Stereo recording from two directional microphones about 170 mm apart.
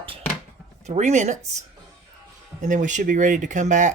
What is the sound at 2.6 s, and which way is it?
Speech, 50° right (ahead or behind).